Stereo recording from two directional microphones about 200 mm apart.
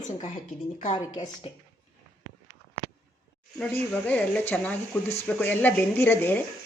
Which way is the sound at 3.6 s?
5° left (ahead or behind).